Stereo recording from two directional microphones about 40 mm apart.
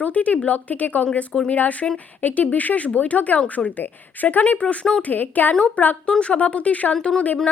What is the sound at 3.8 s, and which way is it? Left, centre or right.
A woman's voice, left.